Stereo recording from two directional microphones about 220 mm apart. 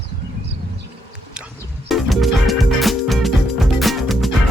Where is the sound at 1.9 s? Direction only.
Centre (ahead or behind).